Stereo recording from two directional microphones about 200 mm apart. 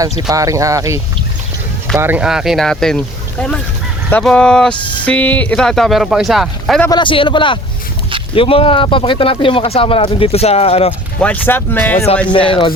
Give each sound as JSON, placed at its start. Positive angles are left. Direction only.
{"t": 0.0, "sound": "speech", "side_deg": -15}
{"t": 6.8, "sound": "speech", "side_deg": 20}
{"t": 11.2, "sound": "speech", "side_deg": 10}
{"t": 12.5, "sound": "speech", "side_deg": 25}